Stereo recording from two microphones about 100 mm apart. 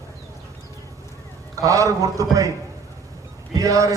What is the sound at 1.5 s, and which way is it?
Speech, 35° right (ahead or behind).